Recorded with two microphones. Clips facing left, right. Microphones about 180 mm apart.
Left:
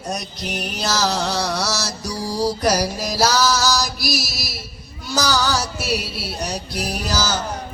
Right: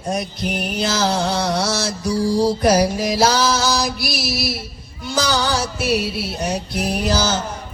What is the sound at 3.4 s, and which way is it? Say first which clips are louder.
Music: right 1 dB; 25° right (ahead or behind).